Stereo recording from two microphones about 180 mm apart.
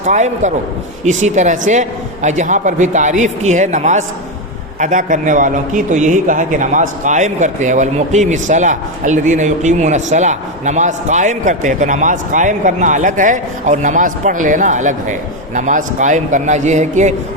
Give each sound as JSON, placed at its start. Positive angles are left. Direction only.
{"t": 0.0, "sound": "a man's voice", "side_deg": -40}